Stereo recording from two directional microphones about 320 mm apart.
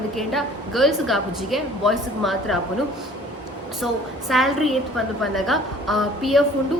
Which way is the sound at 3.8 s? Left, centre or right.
Centre.